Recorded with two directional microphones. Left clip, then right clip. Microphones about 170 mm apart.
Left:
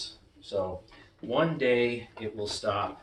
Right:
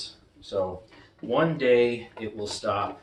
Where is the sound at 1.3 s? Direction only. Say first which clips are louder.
Right 4 dB; 15° right (ahead or behind).